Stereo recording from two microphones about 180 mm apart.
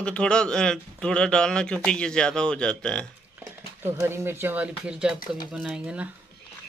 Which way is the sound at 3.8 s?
15° right (ahead or behind).